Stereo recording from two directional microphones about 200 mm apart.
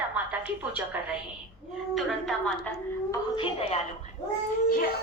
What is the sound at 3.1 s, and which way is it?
Speech, 25° left (ahead or behind).